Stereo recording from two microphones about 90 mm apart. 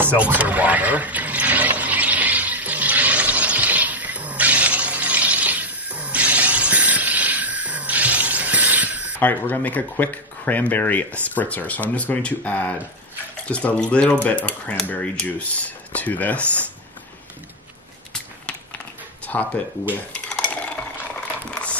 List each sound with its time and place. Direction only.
0.2 s a sound: 15° right (ahead or behind)
9.2 s speech: 20° left (ahead or behind)
19.2 s speech: 15° left (ahead or behind)
20.2 s dishes: 10° left (ahead or behind)